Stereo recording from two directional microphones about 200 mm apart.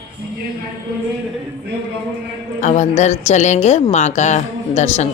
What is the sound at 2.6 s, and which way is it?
Speech, 35° left (ahead or behind).